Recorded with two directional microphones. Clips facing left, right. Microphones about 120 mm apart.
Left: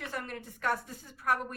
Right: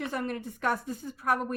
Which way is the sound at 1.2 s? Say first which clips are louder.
Right 2 dB; 35° right (ahead or behind).